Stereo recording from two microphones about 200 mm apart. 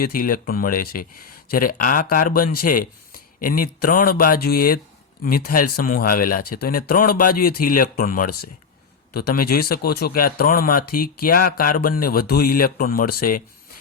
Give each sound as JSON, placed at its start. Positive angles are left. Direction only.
{"t": 0.0, "sound": "speech", "side_deg": 45}